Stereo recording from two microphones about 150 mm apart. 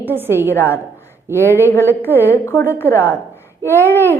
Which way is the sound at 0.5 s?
15° left (ahead or behind).